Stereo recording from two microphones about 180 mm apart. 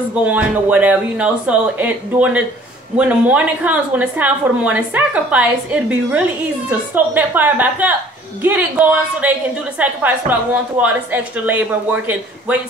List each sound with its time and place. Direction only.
0.2 s a woman's voice: 10° right (ahead or behind)